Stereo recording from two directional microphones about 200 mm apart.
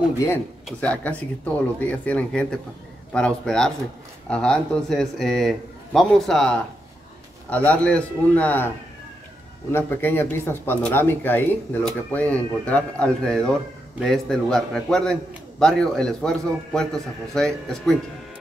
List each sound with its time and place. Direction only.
0.7 s a man's voice: 5° left (ahead or behind)